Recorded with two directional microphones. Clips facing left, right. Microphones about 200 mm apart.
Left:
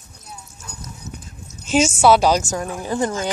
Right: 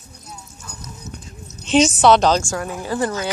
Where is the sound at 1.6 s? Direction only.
5° left (ahead or behind).